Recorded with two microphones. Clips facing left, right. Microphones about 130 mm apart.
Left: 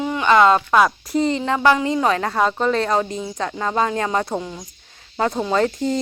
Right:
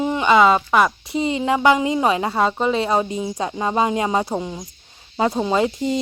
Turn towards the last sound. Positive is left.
turn(degrees=-10)  # may be behind; listen again after turning